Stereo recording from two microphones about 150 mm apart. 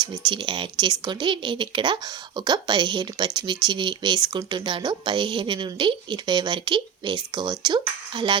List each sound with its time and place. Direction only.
0.0 s speech: 30° right (ahead or behind)